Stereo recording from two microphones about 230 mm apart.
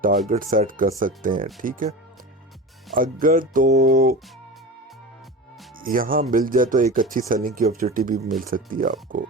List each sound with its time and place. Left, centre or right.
0.3 s speech: right
5.8 s speech: right